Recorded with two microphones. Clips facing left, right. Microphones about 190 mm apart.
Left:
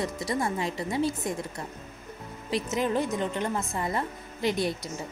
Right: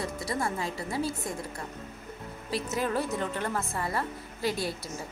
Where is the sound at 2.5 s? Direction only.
20° left (ahead or behind).